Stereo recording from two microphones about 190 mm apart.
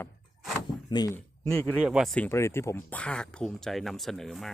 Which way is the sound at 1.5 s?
5° left (ahead or behind).